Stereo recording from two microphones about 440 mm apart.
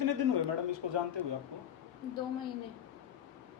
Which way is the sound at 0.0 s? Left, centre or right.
Right.